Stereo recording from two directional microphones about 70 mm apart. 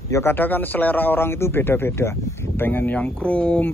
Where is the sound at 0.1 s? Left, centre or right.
Left.